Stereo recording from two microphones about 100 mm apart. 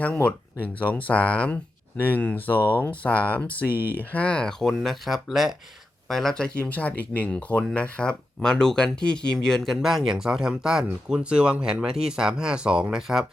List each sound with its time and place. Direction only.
0.0 s speech: 15° left (ahead or behind)
2.6 s speech: 20° right (ahead or behind)
2.9 s speech: 15° left (ahead or behind)
3.7 s speech: 20° right (ahead or behind)
4.1 s speech: 10° left (ahead or behind); by 13.2 s 5° right (ahead or behind)